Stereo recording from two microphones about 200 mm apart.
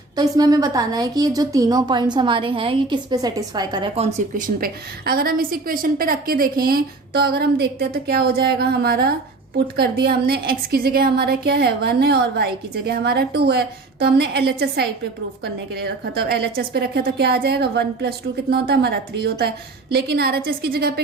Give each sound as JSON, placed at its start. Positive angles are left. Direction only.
{"t": 0.2, "sound": "speech", "side_deg": -20}
{"t": 4.4, "sound": "a woman's voice", "side_deg": -45}